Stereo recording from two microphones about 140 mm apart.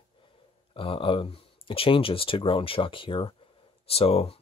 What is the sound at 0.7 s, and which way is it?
Speech, 40° left (ahead or behind).